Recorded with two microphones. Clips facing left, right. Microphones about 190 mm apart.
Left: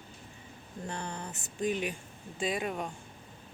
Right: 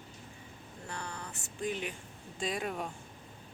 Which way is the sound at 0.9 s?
20° left (ahead or behind).